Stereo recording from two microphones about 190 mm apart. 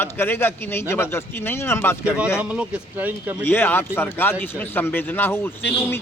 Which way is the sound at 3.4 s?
10° left (ahead or behind).